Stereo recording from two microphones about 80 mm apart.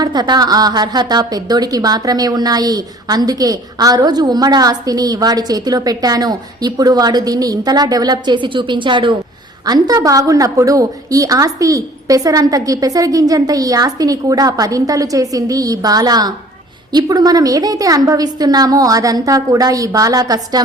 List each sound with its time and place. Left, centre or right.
0.0 s a woman's voice: right
9.6 s a woman's voice: right